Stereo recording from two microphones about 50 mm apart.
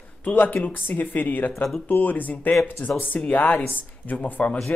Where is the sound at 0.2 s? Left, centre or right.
Left.